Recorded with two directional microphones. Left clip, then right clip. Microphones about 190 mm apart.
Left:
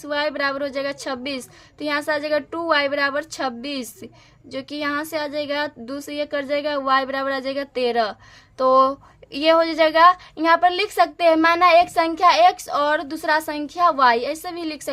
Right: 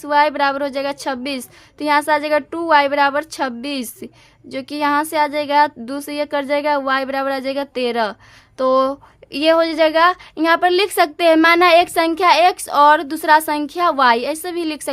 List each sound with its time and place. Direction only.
0.0 s a woman's voice: 30° right (ahead or behind)